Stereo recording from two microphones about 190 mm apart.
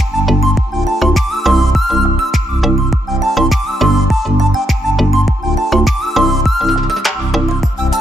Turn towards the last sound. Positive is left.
turn(degrees=0)  # may be behind; listen again after turning